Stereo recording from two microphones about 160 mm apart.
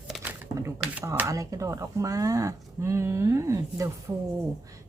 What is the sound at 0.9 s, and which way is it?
Speech, 10° right (ahead or behind).